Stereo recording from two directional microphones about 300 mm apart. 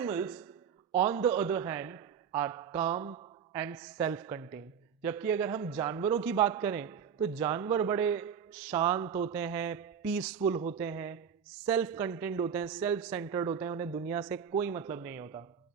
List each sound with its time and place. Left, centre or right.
0.0 s speech: centre
10.4 s speech: centre